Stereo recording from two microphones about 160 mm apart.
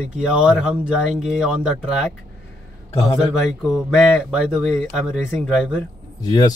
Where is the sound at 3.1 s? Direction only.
5° right (ahead or behind).